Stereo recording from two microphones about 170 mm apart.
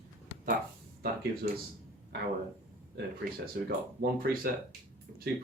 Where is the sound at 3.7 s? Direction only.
60° right (ahead or behind).